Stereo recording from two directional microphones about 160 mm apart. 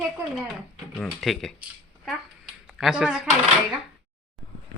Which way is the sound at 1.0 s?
Centre (ahead or behind).